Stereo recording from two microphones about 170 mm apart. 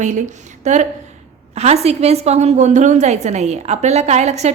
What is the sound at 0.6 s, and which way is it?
A woman's voice, 45° right (ahead or behind).